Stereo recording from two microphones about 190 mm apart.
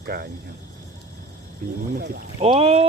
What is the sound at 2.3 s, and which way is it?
Speech, 30° right (ahead or behind).